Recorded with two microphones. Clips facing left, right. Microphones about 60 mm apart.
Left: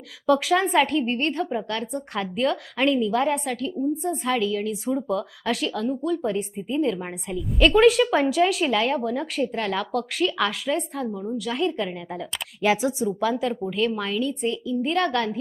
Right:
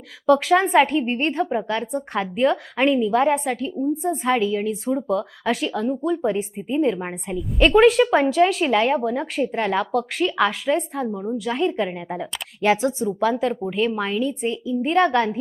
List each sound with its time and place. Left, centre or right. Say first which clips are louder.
0.3 s a woman's voice: right 4 dB; centre
1.9 s a woman's voice: right 4 dB; centre
3.8 s speech: right 4 dB; centre
4.4 s a woman's voice: right 3 dB; centre
5.0 s a woman's voice: right 3 dB; centre
6.8 s speech: right 5 dB; right
7.3 s speech: right 1 dB; centre
9.6 s a woman's voice: right 7 dB; centre
9.9 s speech: right 2 dB; centre
11.1 s speech: right 3 dB; right
11.3 s speech: right 2 dB; centre
11.8 s speech: right 4 dB; right
12.6 s a woman's voice: right 2 dB; centre
14.8 s speech: right 6 dB; right